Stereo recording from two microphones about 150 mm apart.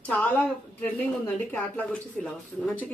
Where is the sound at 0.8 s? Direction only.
10° left (ahead or behind).